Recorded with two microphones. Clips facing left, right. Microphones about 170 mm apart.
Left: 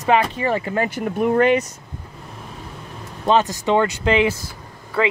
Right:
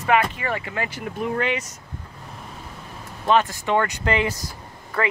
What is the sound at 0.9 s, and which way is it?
Speech, 50° left (ahead or behind).